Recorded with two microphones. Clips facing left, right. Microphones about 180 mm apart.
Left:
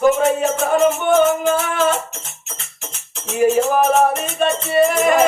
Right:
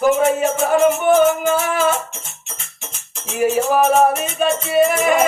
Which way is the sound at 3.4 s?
5° right (ahead or behind).